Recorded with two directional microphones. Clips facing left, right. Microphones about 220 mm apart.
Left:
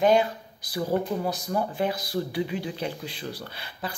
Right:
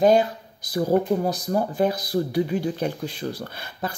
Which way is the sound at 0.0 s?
40° right (ahead or behind).